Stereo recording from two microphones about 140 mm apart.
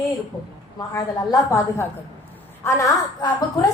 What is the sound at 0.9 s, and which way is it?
A woman's voice, 25° left (ahead or behind).